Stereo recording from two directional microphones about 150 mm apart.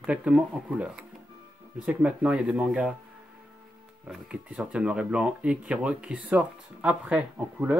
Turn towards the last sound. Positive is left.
turn(degrees=-10)  # may be behind; listen again after turning